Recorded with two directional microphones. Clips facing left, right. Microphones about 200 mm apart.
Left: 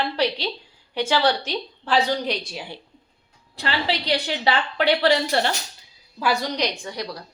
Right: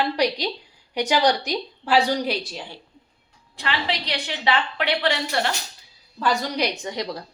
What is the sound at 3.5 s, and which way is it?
A woman's voice, 35° left (ahead or behind).